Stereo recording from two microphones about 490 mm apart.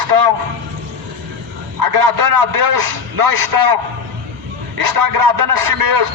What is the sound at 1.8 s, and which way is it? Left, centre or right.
A man's voice, right.